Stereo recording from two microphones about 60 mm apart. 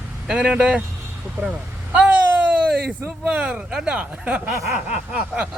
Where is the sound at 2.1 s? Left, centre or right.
Right.